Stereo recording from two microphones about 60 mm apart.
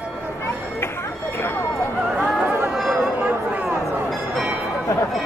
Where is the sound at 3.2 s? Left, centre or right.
Centre.